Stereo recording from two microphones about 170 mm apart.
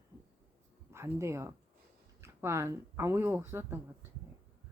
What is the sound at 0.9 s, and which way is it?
A woman's voice, 15° right (ahead or behind).